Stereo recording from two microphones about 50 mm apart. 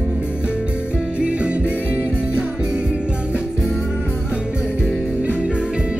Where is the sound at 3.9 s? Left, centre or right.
Right.